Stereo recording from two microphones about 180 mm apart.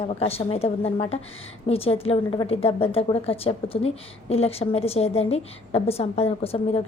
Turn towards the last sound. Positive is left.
turn(degrees=35)  # may be behind; listen again after turning